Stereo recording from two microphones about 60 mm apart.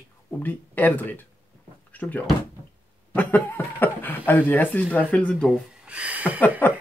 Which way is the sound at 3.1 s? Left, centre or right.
Left.